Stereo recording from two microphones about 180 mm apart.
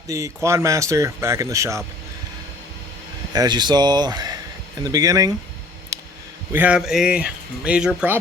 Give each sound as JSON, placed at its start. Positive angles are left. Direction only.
{"t": 0.4, "sound": "speech", "side_deg": -15}
{"t": 3.3, "sound": "speech", "side_deg": -25}
{"t": 6.5, "sound": "speech", "side_deg": -10}